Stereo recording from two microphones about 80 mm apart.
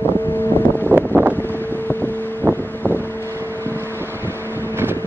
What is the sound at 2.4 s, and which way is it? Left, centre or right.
Wind, right.